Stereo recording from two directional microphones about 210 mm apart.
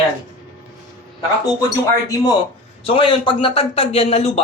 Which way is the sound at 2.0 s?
15° left (ahead or behind).